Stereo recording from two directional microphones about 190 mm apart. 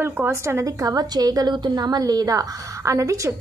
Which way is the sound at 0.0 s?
10° right (ahead or behind).